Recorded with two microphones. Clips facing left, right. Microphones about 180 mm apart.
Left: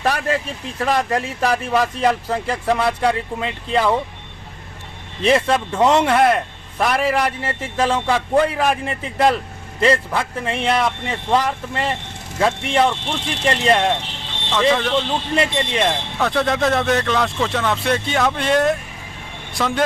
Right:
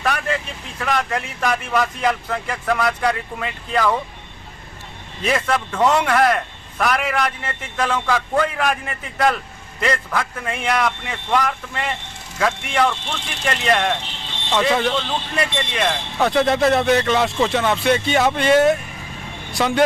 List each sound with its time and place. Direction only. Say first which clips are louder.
0.0 s a man's voice: left 2 dB; 35° left (ahead or behind)
5.2 s a man's voice: left 4 dB; 25° left (ahead or behind)
14.5 s speech: left 1 dB; 10° right (ahead or behind)
15.4 s a man's voice: left 3 dB; 25° left (ahead or behind)
16.2 s speech: right 2 dB; centre (ahead or behind)